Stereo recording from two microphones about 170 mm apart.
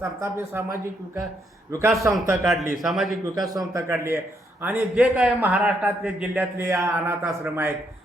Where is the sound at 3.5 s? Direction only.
20° right (ahead or behind).